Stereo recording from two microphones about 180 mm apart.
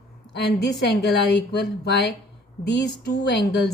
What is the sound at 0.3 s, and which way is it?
Speech, 70° left (ahead or behind).